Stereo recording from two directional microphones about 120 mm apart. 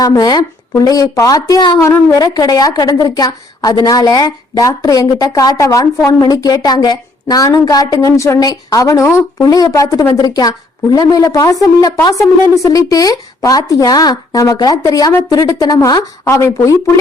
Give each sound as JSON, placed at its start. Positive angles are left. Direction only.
{"t": 0.0, "sound": "a woman's voice", "side_deg": 30}
{"t": 1.8, "sound": "speech", "side_deg": 20}
{"t": 2.2, "sound": "a woman's voice", "side_deg": 30}